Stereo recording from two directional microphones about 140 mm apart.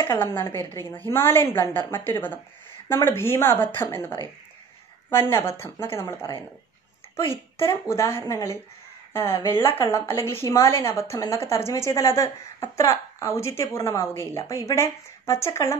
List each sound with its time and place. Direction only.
0.0 s a woman's voice: 20° left (ahead or behind)
5.3 s a woman's voice: 20° left (ahead or behind)
7.9 s a woman's voice: 20° left (ahead or behind)